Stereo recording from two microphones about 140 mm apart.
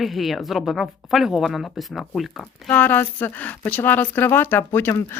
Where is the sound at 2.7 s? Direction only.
15° left (ahead or behind).